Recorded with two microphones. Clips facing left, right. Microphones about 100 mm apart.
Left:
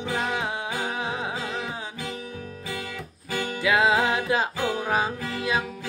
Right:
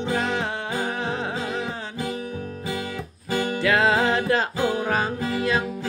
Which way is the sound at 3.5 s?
10° left (ahead or behind).